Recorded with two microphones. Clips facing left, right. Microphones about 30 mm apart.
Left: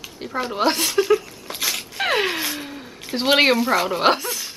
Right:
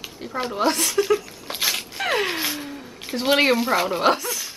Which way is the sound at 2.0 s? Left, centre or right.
Centre.